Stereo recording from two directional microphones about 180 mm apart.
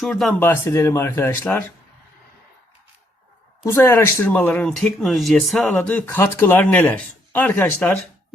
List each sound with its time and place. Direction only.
0.0 s speech: centre (ahead or behind)
0.3 s speech: 10° left (ahead or behind)
3.6 s speech: 15° left (ahead or behind)